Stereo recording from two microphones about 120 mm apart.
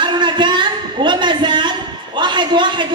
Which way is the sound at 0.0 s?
40° right (ahead or behind).